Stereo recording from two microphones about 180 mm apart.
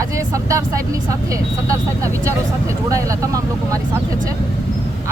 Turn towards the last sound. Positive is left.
turn(degrees=-20)  # may be behind; listen again after turning